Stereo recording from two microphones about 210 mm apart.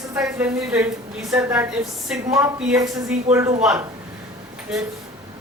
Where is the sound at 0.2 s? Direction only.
5° right (ahead or behind).